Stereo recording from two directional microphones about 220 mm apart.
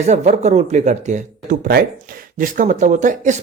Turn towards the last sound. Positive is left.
turn(degrees=-35)  # may be behind; listen again after turning